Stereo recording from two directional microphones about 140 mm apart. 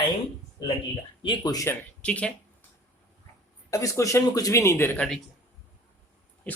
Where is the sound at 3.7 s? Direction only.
25° left (ahead or behind).